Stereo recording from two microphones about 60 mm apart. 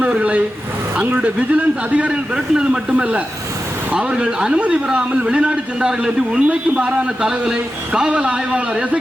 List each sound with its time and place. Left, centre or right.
0.2 s a man's voice: right
2.0 s a man's voice: centre